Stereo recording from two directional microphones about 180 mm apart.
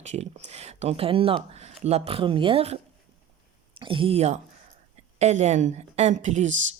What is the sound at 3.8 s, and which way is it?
Speech, 30° right (ahead or behind).